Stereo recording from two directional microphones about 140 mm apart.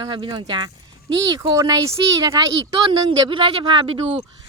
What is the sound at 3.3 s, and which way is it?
Speech, 35° right (ahead or behind).